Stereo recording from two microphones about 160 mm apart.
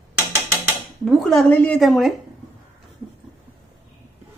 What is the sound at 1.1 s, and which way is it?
Speech, centre (ahead or behind).